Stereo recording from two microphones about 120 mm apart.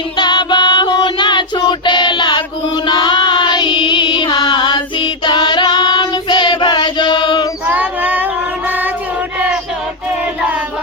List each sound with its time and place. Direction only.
0.2 s music: 40° left (ahead or behind)
7.7 s child singing: 15° right (ahead or behind)